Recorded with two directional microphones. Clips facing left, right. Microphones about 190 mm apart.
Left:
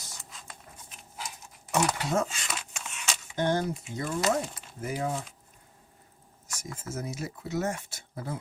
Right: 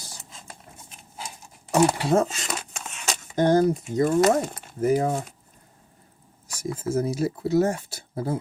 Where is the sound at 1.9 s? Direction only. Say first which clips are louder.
Right 7 dB; 30° right (ahead or behind); by 5.3 s 45° right (ahead or behind).